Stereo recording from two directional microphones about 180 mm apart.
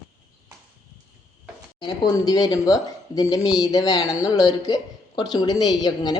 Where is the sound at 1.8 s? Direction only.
20° left (ahead or behind).